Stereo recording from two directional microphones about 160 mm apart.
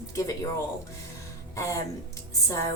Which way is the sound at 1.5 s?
20° left (ahead or behind).